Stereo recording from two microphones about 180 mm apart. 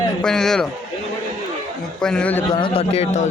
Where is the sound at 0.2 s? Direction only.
5° left (ahead or behind).